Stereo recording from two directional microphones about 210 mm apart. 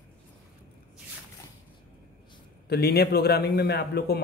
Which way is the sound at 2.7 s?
50° left (ahead or behind).